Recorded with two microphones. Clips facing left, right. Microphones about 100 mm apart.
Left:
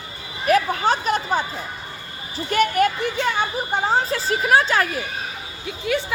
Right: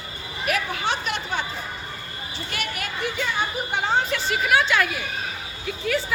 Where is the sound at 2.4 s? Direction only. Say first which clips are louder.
Left 15 dB; 40° left (ahead or behind).